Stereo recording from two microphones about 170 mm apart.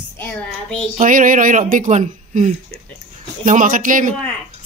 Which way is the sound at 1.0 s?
50° right (ahead or behind).